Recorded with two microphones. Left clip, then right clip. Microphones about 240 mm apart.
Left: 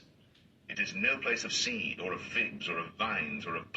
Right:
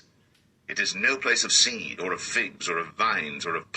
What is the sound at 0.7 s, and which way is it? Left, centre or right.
A man's voice, right.